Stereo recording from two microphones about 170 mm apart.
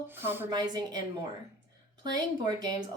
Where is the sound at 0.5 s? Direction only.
25° right (ahead or behind).